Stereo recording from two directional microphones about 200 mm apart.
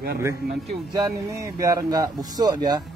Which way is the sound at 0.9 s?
15° right (ahead or behind).